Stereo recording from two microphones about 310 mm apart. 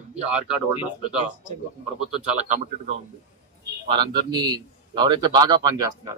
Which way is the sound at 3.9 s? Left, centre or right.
Centre.